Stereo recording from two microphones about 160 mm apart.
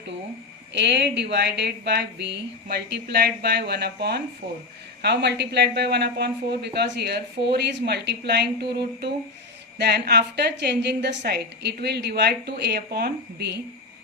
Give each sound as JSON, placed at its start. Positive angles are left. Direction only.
{"t": 0.7, "sound": "speech", "side_deg": -90}